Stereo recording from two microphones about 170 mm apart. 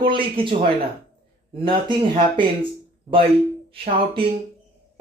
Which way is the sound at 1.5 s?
30° right (ahead or behind).